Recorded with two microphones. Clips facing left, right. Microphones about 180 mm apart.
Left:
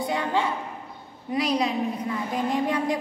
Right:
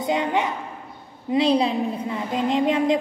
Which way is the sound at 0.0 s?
20° right (ahead or behind).